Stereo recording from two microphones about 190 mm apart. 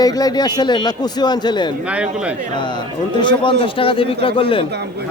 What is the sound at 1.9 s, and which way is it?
Speech, 5° right (ahead or behind).